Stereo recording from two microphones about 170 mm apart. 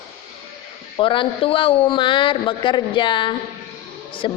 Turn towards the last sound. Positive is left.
turn(degrees=30)  # may be behind; listen again after turning